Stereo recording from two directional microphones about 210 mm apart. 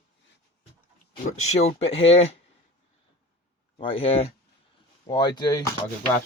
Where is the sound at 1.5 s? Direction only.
30° left (ahead or behind).